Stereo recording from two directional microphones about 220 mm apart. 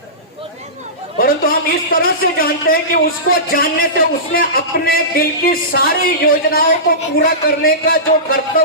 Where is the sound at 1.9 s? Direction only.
40° left (ahead or behind).